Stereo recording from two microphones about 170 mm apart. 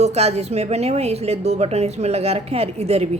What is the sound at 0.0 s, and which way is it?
A woman's voice, 40° right (ahead or behind).